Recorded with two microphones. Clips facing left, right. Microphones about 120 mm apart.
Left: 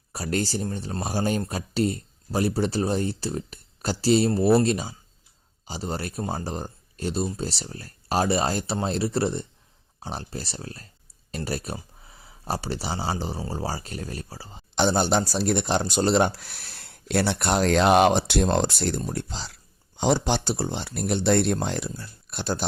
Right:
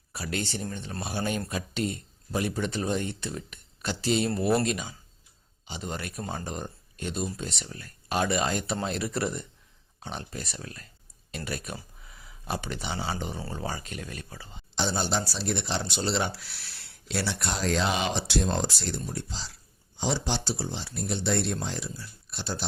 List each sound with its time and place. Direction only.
0.1 s speech: 40° left (ahead or behind)
14.8 s speech: 60° left (ahead or behind)